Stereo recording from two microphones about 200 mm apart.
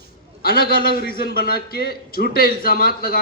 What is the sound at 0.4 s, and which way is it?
Speech, 50° left (ahead or behind).